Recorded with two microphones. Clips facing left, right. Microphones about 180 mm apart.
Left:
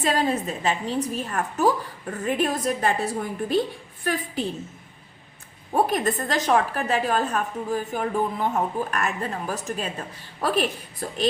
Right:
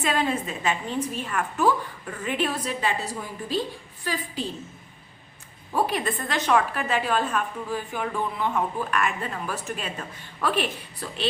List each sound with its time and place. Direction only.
0.0 s a woman's voice: 40° left (ahead or behind); by 4.4 s 55° left (ahead or behind)
5.7 s a woman's voice: 45° left (ahead or behind)